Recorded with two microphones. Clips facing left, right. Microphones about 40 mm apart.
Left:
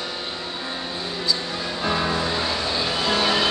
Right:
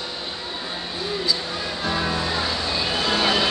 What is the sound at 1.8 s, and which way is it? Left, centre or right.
Music, centre.